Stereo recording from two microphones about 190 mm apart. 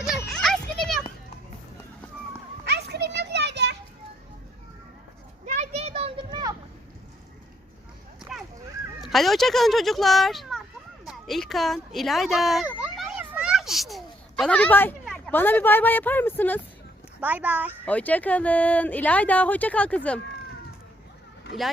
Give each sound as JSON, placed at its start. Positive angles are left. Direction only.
{"t": 0.3, "sound": "children playing", "side_deg": 0}
{"t": 2.6, "sound": "children playing", "side_deg": -60}
{"t": 5.5, "sound": "a sound", "side_deg": -35}
{"t": 8.2, "sound": "dog", "side_deg": 0}
{"t": 9.0, "sound": "speech", "side_deg": 0}
{"t": 11.0, "sound": "a sound", "side_deg": 0}
{"t": 15.0, "sound": "speech", "side_deg": 5}
{"t": 17.2, "sound": "a child's voice", "side_deg": -10}
{"t": 17.8, "sound": "speech", "side_deg": 10}